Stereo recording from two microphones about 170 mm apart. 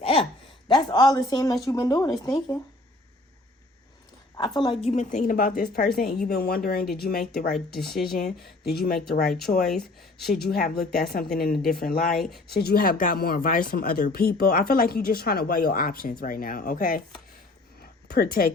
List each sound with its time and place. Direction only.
0.0 s a sound: 35° left (ahead or behind)
0.7 s speech: 25° left (ahead or behind)
4.4 s a woman's voice: 30° left (ahead or behind); by 9.3 s 65° left (ahead or behind)
9.6 s speech: centre (ahead or behind)
10.2 s speech: 65° left (ahead or behind)
18.1 s speech: 65° left (ahead or behind)